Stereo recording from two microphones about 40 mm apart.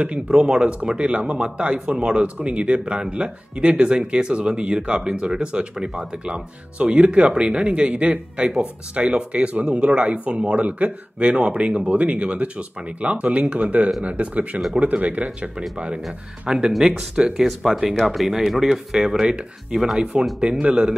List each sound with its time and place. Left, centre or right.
0.3 s speech: right
16.4 s speech: centre
19.2 s speech: right